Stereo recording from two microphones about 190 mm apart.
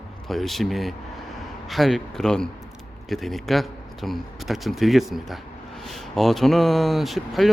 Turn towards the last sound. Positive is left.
turn(degrees=0)  # may be behind; listen again after turning